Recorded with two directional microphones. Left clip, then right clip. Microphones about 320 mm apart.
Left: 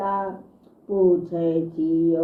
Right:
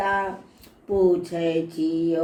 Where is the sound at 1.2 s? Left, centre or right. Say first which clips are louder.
Left 1 dB; centre.